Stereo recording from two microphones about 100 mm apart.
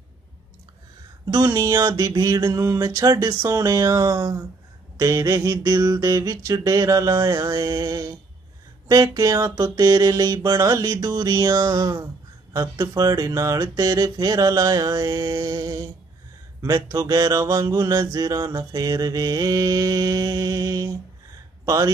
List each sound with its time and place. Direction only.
1.2 s mantra: 40° right (ahead or behind)